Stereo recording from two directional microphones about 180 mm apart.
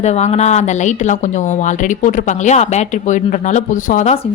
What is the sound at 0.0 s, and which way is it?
Speech, 40° left (ahead or behind).